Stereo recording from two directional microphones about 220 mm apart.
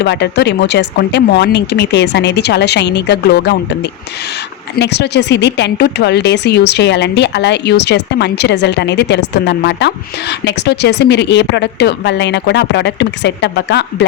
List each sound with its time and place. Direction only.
0.0 s speech: 50° left (ahead or behind)
4.8 s speech: 50° left (ahead or behind)